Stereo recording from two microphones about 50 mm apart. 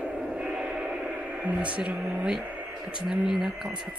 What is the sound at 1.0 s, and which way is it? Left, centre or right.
Radio, right.